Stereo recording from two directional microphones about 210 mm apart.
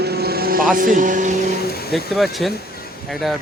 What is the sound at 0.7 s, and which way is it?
Speech, 40° right (ahead or behind).